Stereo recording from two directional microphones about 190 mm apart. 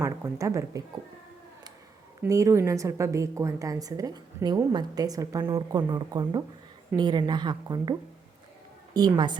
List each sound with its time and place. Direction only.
0.0 s a woman's voice: 15° right (ahead or behind)
2.2 s a woman's voice: 15° right (ahead or behind)